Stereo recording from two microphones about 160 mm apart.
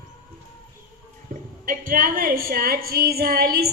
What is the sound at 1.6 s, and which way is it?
A woman's voice, 60° right (ahead or behind).